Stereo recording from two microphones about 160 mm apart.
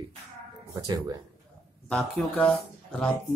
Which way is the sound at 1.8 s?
5° left (ahead or behind).